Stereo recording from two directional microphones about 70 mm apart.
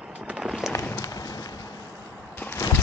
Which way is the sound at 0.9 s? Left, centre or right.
Left.